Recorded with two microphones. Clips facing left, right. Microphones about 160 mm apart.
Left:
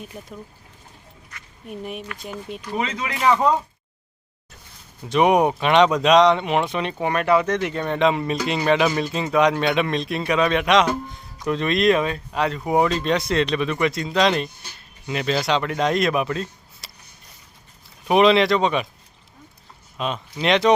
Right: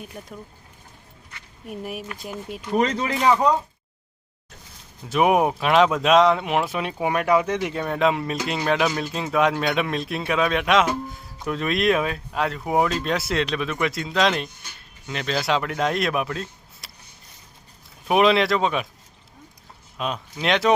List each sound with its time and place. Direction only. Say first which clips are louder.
0.0 s speech: left 1 dB; centre (ahead or behind)
1.6 s speech: even; 5° right (ahead or behind)
2.7 s speech: right 5 dB; 35° right (ahead or behind)
5.0 s speech: left 2 dB; 5° right (ahead or behind)
18.1 s speech: left 2 dB; centre (ahead or behind)
20.0 s speech: left 2 dB; centre (ahead or behind)